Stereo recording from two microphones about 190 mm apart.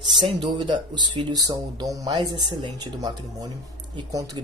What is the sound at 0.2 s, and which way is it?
Speech, 25° right (ahead or behind).